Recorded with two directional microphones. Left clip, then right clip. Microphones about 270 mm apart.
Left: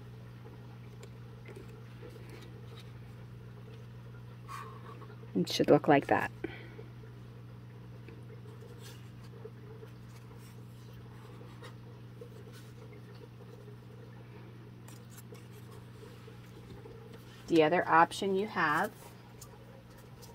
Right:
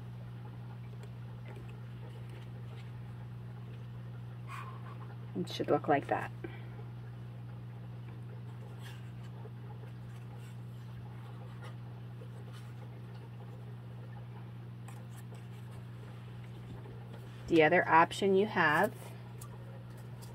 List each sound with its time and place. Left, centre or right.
5.4 s speech: left
17.5 s speech: centre
18.3 s speech: centre